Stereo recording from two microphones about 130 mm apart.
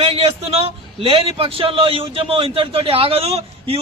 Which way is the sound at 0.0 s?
50° right (ahead or behind).